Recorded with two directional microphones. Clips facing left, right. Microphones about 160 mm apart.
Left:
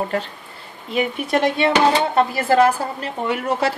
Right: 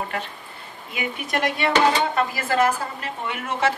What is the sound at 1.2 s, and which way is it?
A woman's voice, 25° left (ahead or behind).